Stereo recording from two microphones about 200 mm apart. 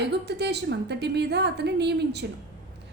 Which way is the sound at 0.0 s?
55° right (ahead or behind).